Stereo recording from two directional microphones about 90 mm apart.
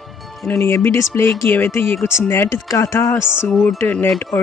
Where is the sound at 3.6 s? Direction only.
20° left (ahead or behind).